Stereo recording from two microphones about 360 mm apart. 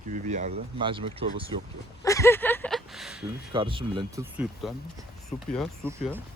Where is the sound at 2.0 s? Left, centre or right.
Centre.